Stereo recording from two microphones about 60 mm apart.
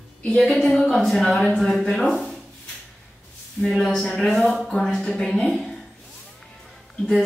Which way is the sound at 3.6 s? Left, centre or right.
Centre.